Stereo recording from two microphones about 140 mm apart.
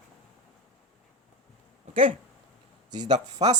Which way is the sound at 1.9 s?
40° right (ahead or behind).